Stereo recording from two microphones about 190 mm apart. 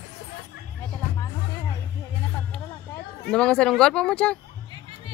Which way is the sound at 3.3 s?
5° left (ahead or behind).